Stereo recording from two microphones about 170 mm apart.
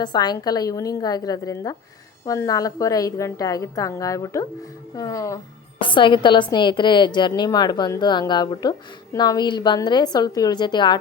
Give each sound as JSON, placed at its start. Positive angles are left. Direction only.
{"t": 0.0, "sound": "a woman's voice", "side_deg": 25}
{"t": 5.8, "sound": "a woman's voice", "side_deg": 30}